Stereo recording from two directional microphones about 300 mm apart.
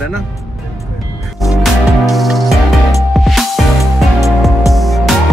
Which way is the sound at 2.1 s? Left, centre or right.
Centre.